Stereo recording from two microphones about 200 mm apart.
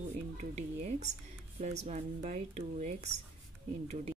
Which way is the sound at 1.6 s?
35° right (ahead or behind).